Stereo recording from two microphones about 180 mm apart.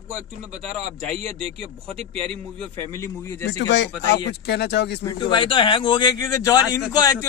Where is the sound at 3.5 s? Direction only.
80° left.